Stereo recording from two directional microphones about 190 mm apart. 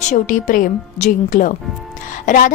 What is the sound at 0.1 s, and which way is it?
A woman's voice, 40° left (ahead or behind).